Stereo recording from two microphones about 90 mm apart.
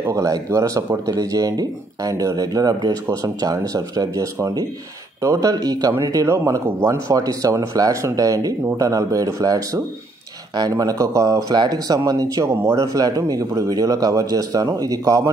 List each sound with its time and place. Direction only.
0.0 s speech: 35° right (ahead or behind)
12.4 s speech: 35° right (ahead or behind)